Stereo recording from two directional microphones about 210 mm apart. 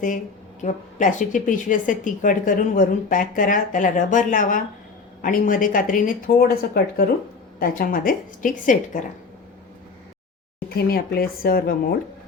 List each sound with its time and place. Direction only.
0.6 s a woman's voice: 35° left (ahead or behind)
10.8 s speech: 45° left (ahead or behind)